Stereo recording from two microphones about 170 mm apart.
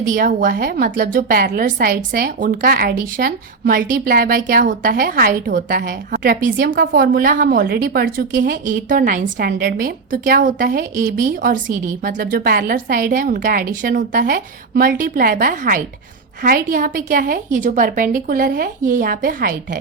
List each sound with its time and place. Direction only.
0.1 s a woman's voice: 50° right (ahead or behind)